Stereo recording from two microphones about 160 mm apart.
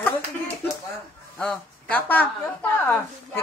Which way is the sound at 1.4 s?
5° left (ahead or behind).